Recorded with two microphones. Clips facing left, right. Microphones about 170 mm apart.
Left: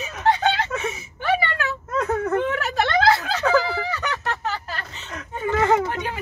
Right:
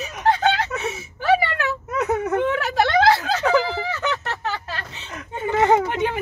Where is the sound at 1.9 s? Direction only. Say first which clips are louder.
Even; 10° right (ahead or behind).